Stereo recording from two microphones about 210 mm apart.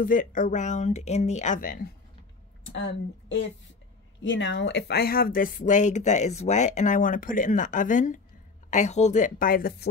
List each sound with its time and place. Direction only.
0.0 s speech: 40° left (ahead or behind)
2.6 s speech: 60° left (ahead or behind); by 9.8 s 45° left (ahead or behind)